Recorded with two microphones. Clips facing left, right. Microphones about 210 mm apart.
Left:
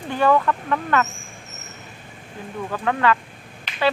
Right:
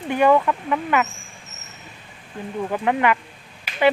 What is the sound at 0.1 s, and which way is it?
Speech, 15° right (ahead or behind).